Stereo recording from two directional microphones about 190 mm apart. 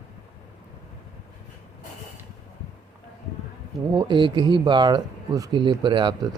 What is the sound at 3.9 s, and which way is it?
Speech, 25° right (ahead or behind).